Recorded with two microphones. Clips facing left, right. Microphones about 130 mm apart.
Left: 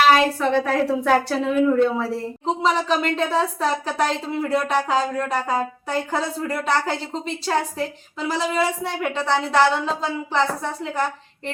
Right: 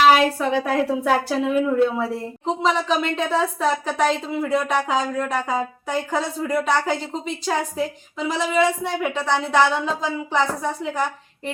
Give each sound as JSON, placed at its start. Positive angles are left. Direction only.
{"t": 0.1, "sound": "speech", "side_deg": -5}